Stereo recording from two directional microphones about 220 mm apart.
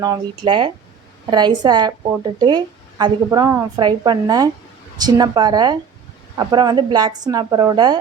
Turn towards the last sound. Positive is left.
turn(degrees=-20)  # may be behind; listen again after turning